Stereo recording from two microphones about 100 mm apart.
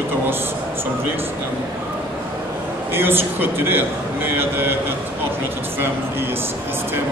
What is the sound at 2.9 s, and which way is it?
Speech, 20° right (ahead or behind).